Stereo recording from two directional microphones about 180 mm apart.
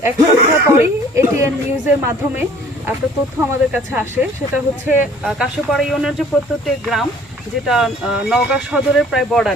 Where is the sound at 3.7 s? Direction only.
10° right (ahead or behind).